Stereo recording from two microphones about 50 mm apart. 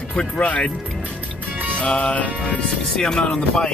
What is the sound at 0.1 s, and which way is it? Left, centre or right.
Speech, centre.